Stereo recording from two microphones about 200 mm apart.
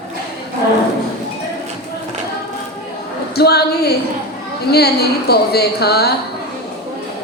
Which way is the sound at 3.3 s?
55° left (ahead or behind).